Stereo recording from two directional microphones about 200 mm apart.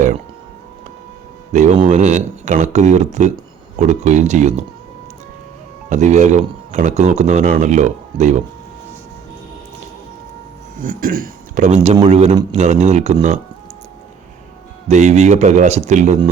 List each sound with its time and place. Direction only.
1.5 s speech: 35° right (ahead or behind)
5.9 s speech: 35° right (ahead or behind)
10.8 s speech: 45° right (ahead or behind)
14.8 s speech: 35° right (ahead or behind)